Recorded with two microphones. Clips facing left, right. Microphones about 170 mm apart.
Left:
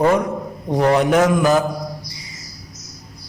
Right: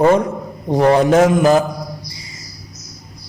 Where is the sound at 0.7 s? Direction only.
30° right (ahead or behind).